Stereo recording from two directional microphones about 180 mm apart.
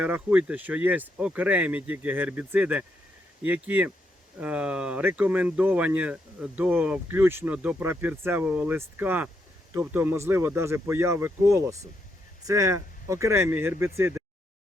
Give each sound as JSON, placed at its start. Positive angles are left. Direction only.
{"t": 0.0, "sound": "speech", "side_deg": -10}